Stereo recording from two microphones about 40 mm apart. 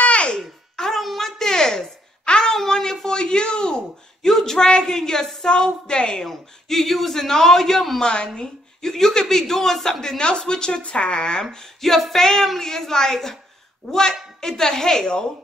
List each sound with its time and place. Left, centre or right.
0.0 s babbling: left
0.7 s a sound: centre
4.3 s a sound: centre
4.6 s a woman's voice: left
5.5 s a woman's voice: left
6.2 s a woman's voice: centre
8.0 s a woman's voice: left
8.4 s a woman's voice: centre
11.8 s female singing: centre
12.2 s a woman's voice: centre